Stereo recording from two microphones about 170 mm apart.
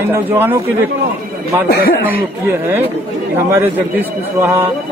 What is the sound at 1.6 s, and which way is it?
Speech, 60° left (ahead or behind).